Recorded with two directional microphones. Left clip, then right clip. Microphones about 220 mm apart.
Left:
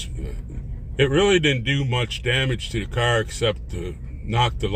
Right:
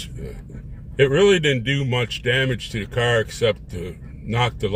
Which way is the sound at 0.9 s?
20° right (ahead or behind).